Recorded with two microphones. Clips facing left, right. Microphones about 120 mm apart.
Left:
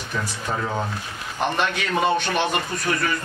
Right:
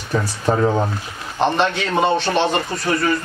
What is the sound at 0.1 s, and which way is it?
A man's voice, 40° right (ahead or behind).